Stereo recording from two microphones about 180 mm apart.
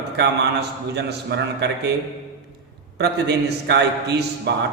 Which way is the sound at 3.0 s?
70° right (ahead or behind).